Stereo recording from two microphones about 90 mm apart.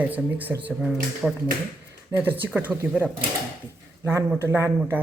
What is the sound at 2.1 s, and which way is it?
Speech, 20° right (ahead or behind).